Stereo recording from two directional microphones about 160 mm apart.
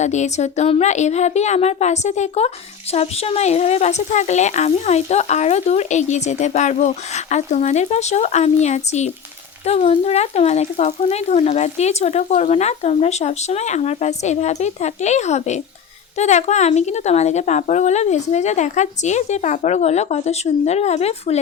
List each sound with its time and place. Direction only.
0.0 s speech: 45° left (ahead or behind)